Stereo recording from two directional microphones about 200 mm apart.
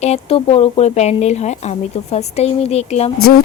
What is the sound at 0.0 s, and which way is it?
Speech, 30° left (ahead or behind).